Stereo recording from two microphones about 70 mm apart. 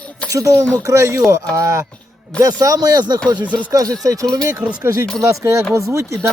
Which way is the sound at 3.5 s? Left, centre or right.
Right.